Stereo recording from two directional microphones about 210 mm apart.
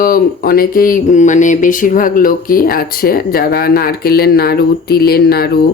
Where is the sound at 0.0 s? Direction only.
45° left (ahead or behind).